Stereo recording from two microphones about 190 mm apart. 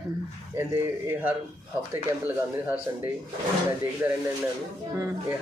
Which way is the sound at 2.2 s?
10° right (ahead or behind).